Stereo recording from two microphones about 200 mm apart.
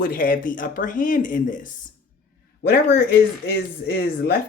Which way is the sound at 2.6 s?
50° left (ahead or behind).